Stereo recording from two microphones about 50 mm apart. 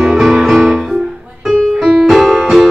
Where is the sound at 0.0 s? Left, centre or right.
Centre.